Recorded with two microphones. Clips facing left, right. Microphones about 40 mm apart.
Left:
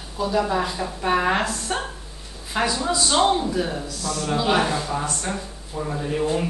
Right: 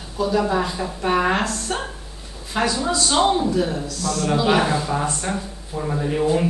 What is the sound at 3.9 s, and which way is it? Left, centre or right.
Speech, centre.